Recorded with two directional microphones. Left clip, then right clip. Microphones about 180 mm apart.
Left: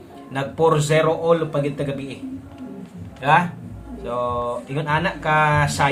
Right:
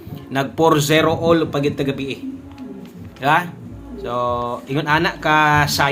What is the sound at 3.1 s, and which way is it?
A man's voice, 35° right (ahead or behind).